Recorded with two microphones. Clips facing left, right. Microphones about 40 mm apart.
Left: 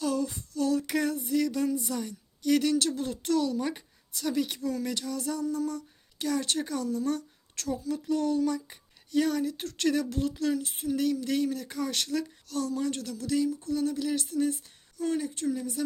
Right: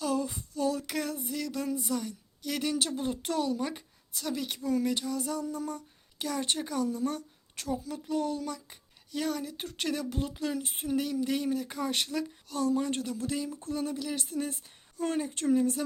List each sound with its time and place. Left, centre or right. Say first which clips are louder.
0.0 s female singing: left 1 dB; centre
3.6 s speech: left 2 dB; centre
5.5 s speech: left 4 dB; centre
6.1 s a woman's voice: left 3 dB; centre
9.5 s speech: left 5 dB; centre
10.6 s speech: left 3 dB; right
10.9 s speech: left 2 dB; centre
14.5 s a sound: left 3 dB; right
15.4 s speech: right 5 dB; right